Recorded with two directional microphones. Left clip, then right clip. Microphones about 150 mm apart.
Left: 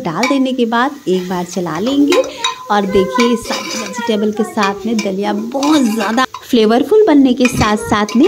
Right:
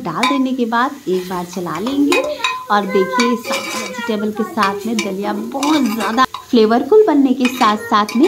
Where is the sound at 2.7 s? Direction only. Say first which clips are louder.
Left 2 dB; 35° left (ahead or behind).